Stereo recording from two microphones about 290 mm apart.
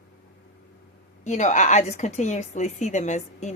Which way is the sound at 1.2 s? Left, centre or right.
Left.